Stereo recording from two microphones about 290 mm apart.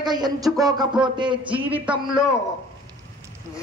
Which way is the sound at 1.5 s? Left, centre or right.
Centre.